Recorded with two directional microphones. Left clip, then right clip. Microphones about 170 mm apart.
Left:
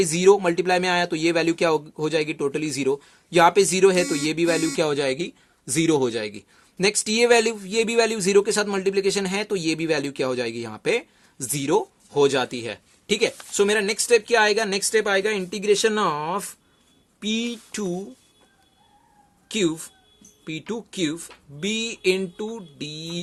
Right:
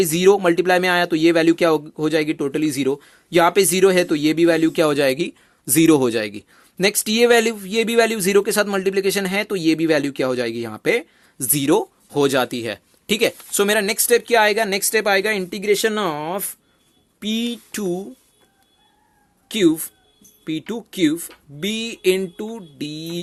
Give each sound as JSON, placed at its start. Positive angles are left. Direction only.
{"t": 0.0, "sound": "speech", "side_deg": -30}
{"t": 19.5, "sound": "speech", "side_deg": -35}